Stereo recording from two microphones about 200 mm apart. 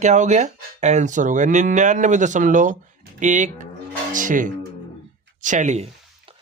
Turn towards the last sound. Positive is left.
turn(degrees=-30)  # may be behind; listen again after turning